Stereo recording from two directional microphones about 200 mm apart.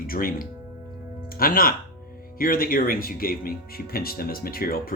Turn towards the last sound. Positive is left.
turn(degrees=45)  # may be behind; listen again after turning